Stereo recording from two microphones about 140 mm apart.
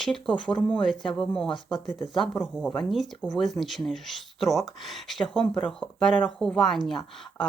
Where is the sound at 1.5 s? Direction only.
35° left (ahead or behind).